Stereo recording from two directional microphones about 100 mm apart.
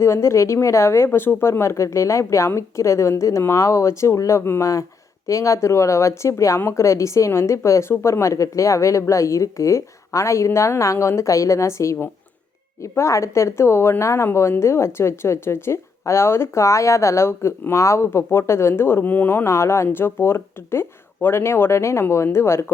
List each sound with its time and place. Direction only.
0.0 s a woman's voice: 30° left (ahead or behind)